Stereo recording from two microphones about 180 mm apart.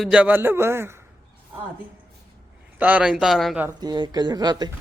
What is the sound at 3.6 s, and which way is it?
Speech, 25° right (ahead or behind).